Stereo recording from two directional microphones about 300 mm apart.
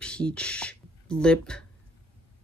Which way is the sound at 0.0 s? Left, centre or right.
Centre.